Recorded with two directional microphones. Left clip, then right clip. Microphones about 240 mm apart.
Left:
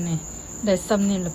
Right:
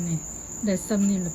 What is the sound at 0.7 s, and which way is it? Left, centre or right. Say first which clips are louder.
Speech: left 7 dB; right.